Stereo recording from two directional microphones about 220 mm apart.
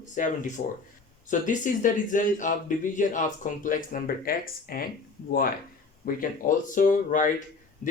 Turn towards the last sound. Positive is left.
turn(degrees=35)  # may be behind; listen again after turning